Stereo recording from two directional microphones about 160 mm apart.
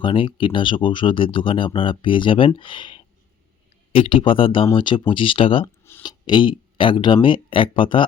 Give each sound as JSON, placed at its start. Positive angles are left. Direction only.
{"t": 0.0, "sound": "speech", "side_deg": 30}
{"t": 5.6, "sound": "a sound", "side_deg": 15}
{"t": 6.0, "sound": "speech", "side_deg": 25}